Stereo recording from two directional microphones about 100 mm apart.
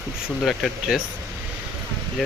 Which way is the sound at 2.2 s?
5° right (ahead or behind).